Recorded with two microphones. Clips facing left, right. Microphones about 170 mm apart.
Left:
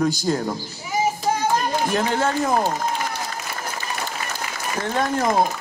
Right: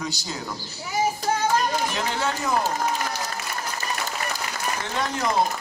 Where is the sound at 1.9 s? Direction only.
50° left (ahead or behind).